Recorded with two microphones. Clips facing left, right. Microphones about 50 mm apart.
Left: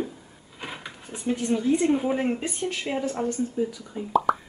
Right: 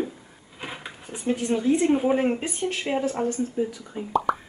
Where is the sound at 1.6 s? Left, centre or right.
Centre.